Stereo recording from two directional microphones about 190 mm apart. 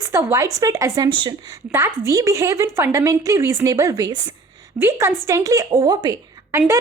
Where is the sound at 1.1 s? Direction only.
25° right (ahead or behind).